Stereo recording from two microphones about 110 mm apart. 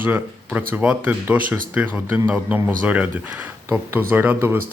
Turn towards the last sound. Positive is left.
turn(degrees=-20)  # may be behind; listen again after turning